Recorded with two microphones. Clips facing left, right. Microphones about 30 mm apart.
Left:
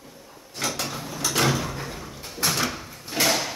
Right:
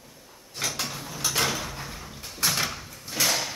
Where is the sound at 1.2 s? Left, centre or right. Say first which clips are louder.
Left 4 dB; centre.